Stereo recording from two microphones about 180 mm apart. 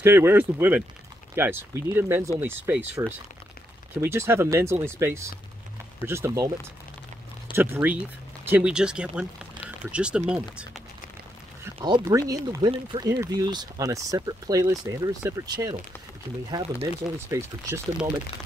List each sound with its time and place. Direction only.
0.0 s speech: 15° right (ahead or behind)
7.5 s speech: 10° right (ahead or behind)
11.6 s speech: 20° right (ahead or behind)